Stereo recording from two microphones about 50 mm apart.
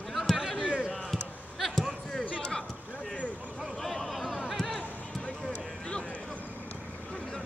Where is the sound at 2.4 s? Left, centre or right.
Centre.